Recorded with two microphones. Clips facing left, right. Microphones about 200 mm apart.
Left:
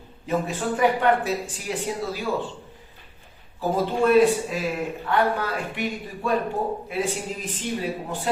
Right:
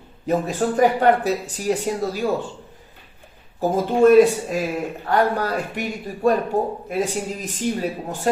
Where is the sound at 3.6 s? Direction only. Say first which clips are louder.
Right 6 dB; 45° right (ahead or behind).